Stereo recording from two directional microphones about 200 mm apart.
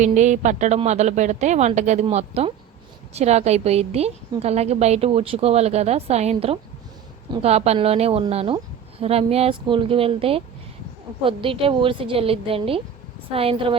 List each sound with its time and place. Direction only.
0.0 s a woman's voice: 35° right (ahead or behind)